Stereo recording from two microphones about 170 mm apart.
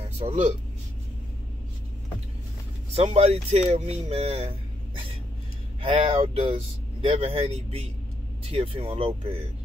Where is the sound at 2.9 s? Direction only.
35° right (ahead or behind).